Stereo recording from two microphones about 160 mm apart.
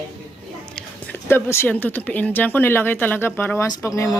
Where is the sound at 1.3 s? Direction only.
10° left (ahead or behind).